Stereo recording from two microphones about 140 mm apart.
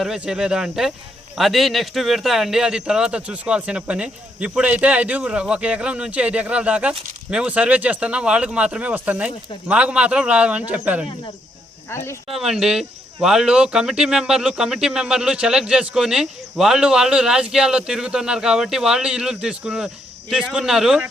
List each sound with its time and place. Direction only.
0.0 s speech: 5° right (ahead or behind)
11.9 s speech: 20° left (ahead or behind)
12.3 s speech: 5° right (ahead or behind)